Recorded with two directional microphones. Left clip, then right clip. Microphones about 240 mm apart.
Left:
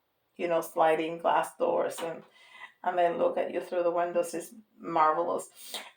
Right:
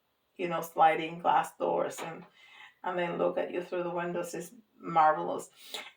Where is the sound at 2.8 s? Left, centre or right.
Left.